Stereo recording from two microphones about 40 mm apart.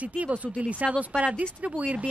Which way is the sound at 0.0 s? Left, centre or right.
Right.